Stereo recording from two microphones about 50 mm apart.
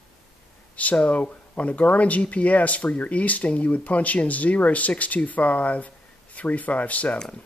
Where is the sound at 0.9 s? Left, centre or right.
Left.